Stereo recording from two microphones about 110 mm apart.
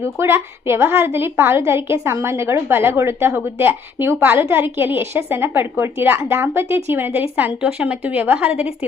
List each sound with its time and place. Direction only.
0.0 s a woman's voice: 20° right (ahead or behind)